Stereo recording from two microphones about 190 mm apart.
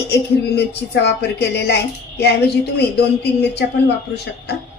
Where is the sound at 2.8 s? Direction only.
60° left (ahead or behind).